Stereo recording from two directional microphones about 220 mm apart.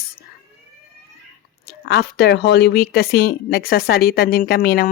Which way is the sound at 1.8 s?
45° left (ahead or behind).